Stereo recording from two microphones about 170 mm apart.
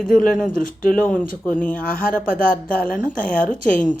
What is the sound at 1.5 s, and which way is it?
Speech, 10° left (ahead or behind).